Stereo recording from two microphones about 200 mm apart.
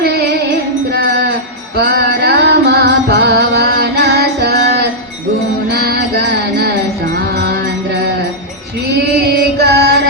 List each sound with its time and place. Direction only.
0.0 s music: 55° right (ahead or behind)
9.1 s music: 55° right (ahead or behind)